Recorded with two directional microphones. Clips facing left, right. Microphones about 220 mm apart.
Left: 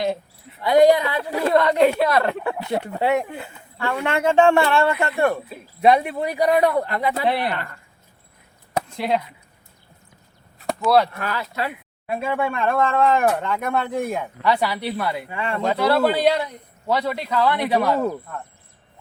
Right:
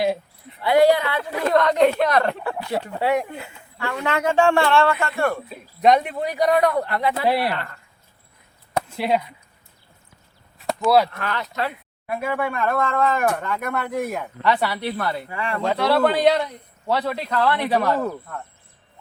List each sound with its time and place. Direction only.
0.8 s a man's voice: 15° left (ahead or behind)
1.3 s a woman's voice: 30° left (ahead or behind)
1.5 s a man's voice: 5° left (ahead or behind)
2.4 s speech: 20° left (ahead or behind)
5.5 s a man's voice: 5° left (ahead or behind)
7.3 s speech: 5° right (ahead or behind)
9.0 s speech: 5° right (ahead or behind)
10.8 s speech: 5° right (ahead or behind)
11.2 s a man's voice: 10° left (ahead or behind)
12.0 s speech: 25° left (ahead or behind)
14.4 s a man's voice: 10° left (ahead or behind)
15.6 s a man's voice: 10° left (ahead or behind)